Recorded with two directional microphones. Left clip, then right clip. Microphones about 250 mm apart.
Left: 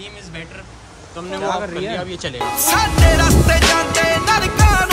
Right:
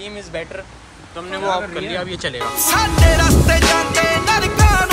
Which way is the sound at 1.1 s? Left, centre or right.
Centre.